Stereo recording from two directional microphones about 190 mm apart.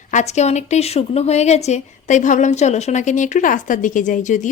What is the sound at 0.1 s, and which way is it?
A woman's voice, 40° left (ahead or behind).